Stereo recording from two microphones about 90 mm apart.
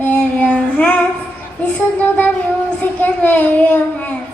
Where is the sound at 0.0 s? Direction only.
15° left (ahead or behind).